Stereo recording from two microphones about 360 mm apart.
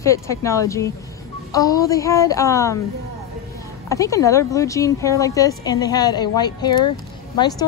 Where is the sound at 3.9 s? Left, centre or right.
Centre.